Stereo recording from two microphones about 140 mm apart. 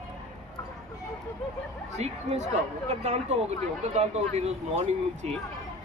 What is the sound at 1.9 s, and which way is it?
Speech, 55° right (ahead or behind).